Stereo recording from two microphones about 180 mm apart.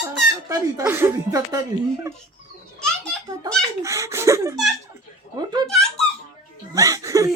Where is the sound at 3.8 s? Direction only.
15° right (ahead or behind).